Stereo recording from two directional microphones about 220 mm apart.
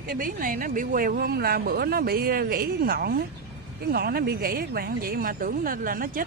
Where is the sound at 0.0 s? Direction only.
40° right (ahead or behind).